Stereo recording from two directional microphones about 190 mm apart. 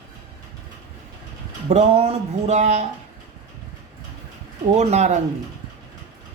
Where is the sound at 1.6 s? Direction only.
35° right (ahead or behind).